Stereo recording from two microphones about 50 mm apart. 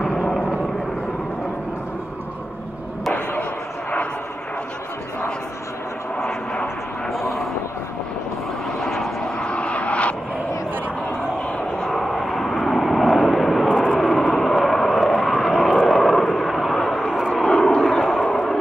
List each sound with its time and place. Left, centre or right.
6.1 s vehicle: centre
8.9 s vehicle: centre
9.4 s vehicle: left
11.8 s vehicle: centre
13.7 s vehicle: centre
13.9 s vehicle: centre
17.4 s vehicle: centre